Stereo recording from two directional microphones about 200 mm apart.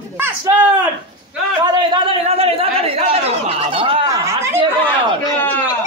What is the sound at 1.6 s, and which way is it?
A man's voice, 25° right (ahead or behind).